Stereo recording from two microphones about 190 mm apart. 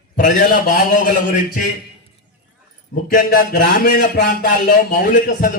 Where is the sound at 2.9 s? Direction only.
50° left (ahead or behind).